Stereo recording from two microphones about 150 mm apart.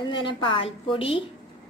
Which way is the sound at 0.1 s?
35° left (ahead or behind).